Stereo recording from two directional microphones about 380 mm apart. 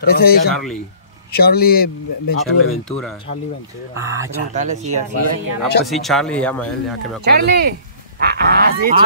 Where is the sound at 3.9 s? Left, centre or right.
Centre.